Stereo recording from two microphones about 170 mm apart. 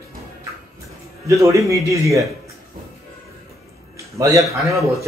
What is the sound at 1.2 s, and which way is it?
Speech, 20° right (ahead or behind).